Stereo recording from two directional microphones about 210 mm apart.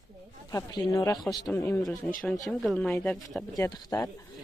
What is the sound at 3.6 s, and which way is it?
Speech, 15° left (ahead or behind).